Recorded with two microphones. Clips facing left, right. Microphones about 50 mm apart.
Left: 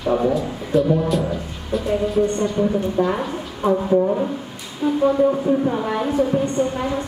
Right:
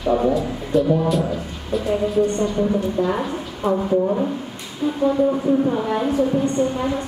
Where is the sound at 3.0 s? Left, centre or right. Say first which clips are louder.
Left 1 dB; centre.